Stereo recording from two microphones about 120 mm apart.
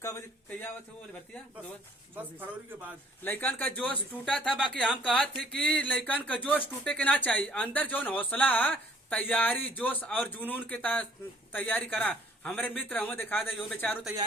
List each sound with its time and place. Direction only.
0.0 s speech: 20° left (ahead or behind)
3.2 s a man's voice: 15° left (ahead or behind)